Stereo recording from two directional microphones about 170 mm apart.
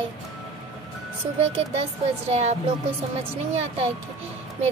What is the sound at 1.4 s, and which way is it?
Music, 35° right (ahead or behind).